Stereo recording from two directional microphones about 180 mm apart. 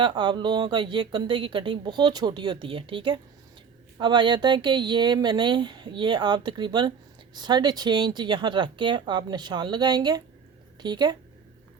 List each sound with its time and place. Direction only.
0.0 s a woman's voice: 25° right (ahead or behind)